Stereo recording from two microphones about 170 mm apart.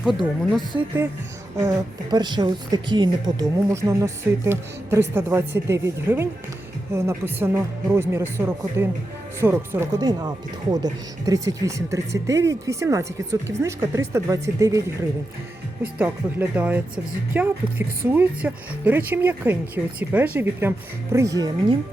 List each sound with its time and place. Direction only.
1.5 s a woman's voice: 25° right (ahead or behind)